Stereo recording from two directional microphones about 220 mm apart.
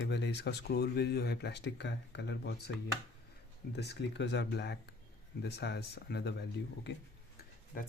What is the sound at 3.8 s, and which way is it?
Speech, 50° left (ahead or behind).